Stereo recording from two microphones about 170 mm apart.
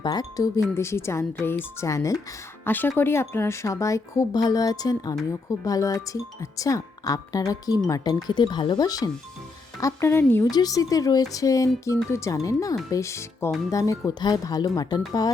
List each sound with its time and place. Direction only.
0.0 s speech: 25° left (ahead or behind)